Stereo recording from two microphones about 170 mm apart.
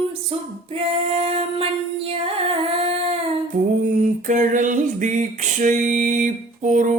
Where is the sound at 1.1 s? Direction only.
35° right (ahead or behind).